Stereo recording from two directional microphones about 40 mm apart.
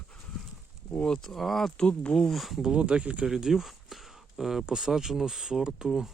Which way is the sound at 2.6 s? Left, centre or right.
Right.